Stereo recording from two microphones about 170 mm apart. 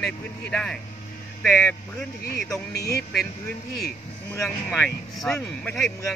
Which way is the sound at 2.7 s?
70° left (ahead or behind).